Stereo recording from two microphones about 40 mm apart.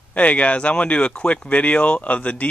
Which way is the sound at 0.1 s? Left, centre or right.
Left.